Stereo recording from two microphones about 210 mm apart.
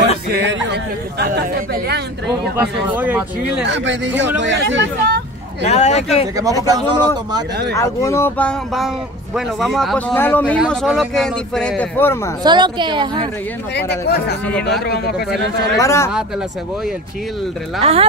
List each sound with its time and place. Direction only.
0.3 s a sound: 55° right (ahead or behind)
2.5 s speech: 10° right (ahead or behind)
3.6 s speech: 60° right (ahead or behind)
5.7 s speech: 30° left (ahead or behind)
6.3 s speech: 15° right (ahead or behind)
7.7 s speech: 15° left (ahead or behind)
12.4 s a woman's voice: 20° right (ahead or behind)
13.7 s speech: 50° left (ahead or behind)
15.8 s speech: 15° left (ahead or behind)
17.8 s a woman's voice: 30° right (ahead or behind)